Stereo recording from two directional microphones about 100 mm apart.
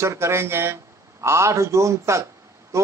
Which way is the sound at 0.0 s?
25° right (ahead or behind).